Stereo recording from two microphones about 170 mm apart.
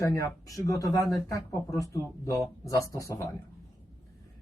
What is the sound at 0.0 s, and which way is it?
Speech, 15° left (ahead or behind).